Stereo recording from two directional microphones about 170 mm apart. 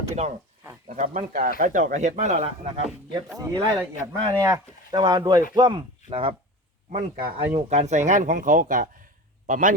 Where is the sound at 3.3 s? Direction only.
20° right (ahead or behind).